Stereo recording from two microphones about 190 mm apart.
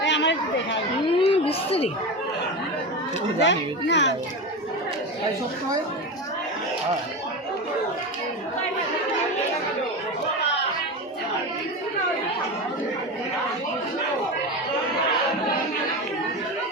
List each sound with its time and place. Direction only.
0.0 s chatter: 70° left (ahead or behind)
1.0 s speech: 30° left (ahead or behind)
3.4 s speech: 70° left (ahead or behind)